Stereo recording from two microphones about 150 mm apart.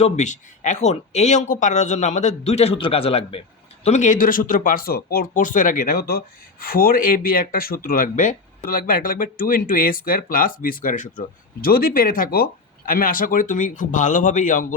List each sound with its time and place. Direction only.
0.0 s speech: 50° left (ahead or behind)
3.8 s speech: 50° left (ahead or behind)
11.6 s speech: 75° left (ahead or behind)